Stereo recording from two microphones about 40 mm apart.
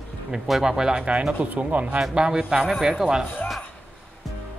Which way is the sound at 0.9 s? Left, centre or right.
Right.